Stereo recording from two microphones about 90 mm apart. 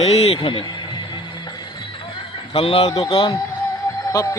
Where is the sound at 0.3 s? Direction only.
60° left (ahead or behind).